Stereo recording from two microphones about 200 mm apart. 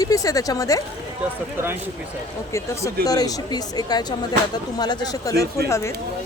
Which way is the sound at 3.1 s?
20° left (ahead or behind).